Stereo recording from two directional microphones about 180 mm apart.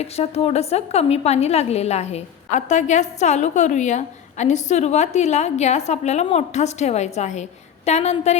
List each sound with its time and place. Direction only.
0.0 s a woman's voice: 35° left (ahead or behind)